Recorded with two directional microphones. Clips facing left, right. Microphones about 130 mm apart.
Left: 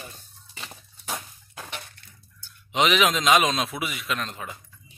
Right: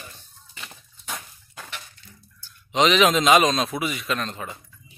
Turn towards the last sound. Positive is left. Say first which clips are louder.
# right 3 dB
turn(degrees=5)  # may be behind; listen again after turning